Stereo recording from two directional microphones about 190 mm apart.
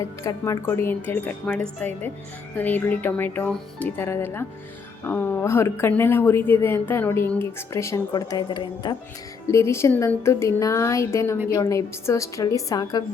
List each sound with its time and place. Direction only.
0.2 s speech: 15° left (ahead or behind)